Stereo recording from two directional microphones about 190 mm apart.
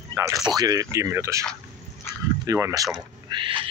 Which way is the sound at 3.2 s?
25° right (ahead or behind).